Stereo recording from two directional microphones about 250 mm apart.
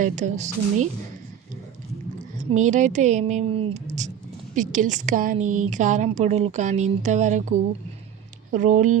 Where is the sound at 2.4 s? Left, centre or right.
Right.